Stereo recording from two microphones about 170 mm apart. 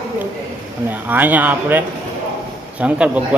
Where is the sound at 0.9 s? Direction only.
10° right (ahead or behind).